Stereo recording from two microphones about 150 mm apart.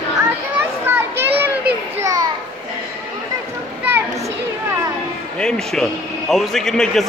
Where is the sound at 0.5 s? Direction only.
15° right (ahead or behind).